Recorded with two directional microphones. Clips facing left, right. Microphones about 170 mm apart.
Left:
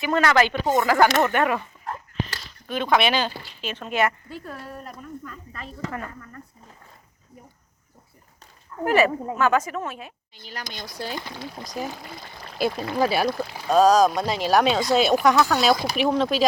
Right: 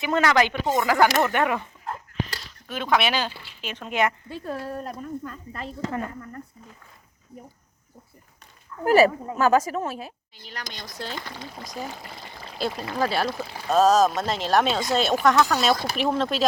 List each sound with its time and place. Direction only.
0.0 s speech: 20° right (ahead or behind)
1.9 s dog: 5° right (ahead or behind)
3.6 s speech: 15° right (ahead or behind)
8.8 s speech: 35° right (ahead or behind)
10.4 s speech: 5° left (ahead or behind)
12.5 s speech: 10° left (ahead or behind)
13.3 s speech: 5° right (ahead or behind)